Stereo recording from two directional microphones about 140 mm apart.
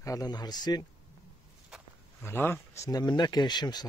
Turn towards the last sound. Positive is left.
turn(degrees=30)  # may be behind; listen again after turning